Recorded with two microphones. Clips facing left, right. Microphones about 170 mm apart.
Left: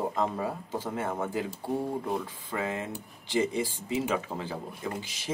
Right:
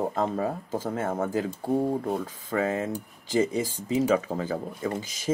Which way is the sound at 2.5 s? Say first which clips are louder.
Right 6 dB; 45° right (ahead or behind).